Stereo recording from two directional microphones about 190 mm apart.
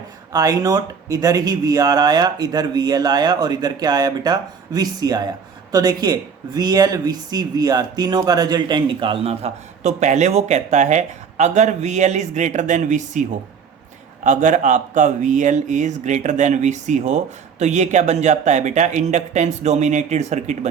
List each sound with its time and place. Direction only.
0.3 s speech: 20° right (ahead or behind); by 13.2 s 40° right (ahead or behind)
14.3 s speech: 40° right (ahead or behind)